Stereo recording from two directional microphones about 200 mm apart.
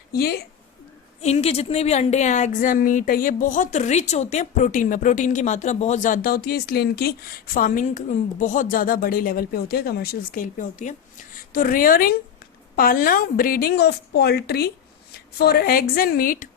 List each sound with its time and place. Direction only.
0.1 s a woman's voice: 50° left (ahead or behind)
1.2 s a woman's voice: 30° left (ahead or behind)